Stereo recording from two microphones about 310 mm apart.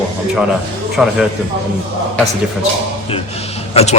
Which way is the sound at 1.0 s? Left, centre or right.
Centre.